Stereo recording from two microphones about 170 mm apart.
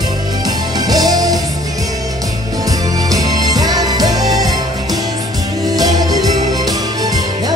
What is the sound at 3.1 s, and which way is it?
Music, 20° right (ahead or behind).